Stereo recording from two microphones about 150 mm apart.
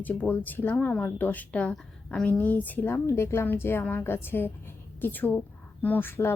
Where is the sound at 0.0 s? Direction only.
10° left (ahead or behind).